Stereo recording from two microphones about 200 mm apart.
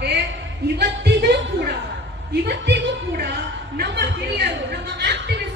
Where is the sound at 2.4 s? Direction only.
55° right (ahead or behind).